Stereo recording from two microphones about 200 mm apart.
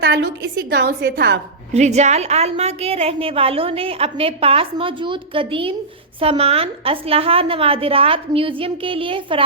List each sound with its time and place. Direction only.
0.0 s a woman's voice: 60° right (ahead or behind)
1.7 s a woman's voice: 35° right (ahead or behind)